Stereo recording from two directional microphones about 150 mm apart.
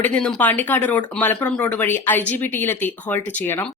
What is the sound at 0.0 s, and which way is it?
Speech, 10° left (ahead or behind).